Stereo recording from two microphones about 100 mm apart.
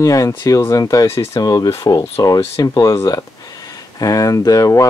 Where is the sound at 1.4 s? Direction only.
40° left (ahead or behind).